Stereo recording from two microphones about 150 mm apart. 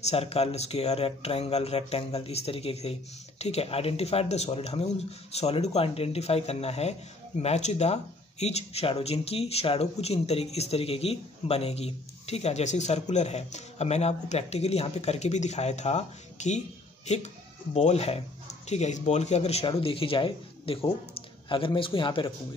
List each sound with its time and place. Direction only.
0.0 s a man's voice: 45° left (ahead or behind)